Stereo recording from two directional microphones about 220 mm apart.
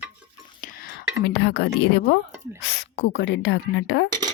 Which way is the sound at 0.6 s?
45° left (ahead or behind).